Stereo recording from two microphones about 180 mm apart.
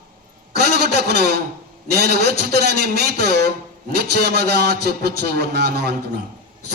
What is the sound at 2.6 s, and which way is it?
A man's voice, 65° right (ahead or behind).